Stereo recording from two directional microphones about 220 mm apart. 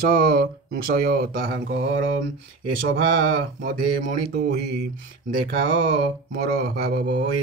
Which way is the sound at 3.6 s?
40° right (ahead or behind).